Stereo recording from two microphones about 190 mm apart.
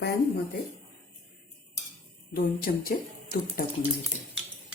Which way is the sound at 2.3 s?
50° left (ahead or behind).